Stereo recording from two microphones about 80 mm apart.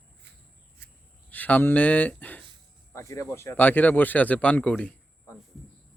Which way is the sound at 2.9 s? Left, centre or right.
Left.